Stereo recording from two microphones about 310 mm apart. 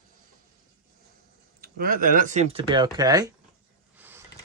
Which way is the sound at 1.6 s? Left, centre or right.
Right.